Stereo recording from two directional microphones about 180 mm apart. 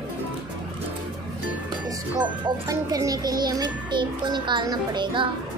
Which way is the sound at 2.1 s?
20° right (ahead or behind).